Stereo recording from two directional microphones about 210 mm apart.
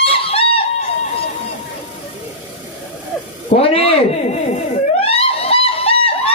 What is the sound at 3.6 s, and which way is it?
Speech, 30° left (ahead or behind).